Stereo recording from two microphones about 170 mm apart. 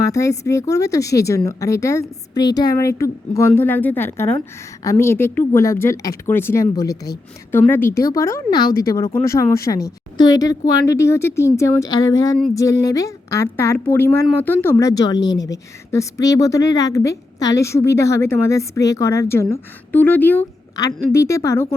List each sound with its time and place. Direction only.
0.0 s a woman's voice: 20° left (ahead or behind)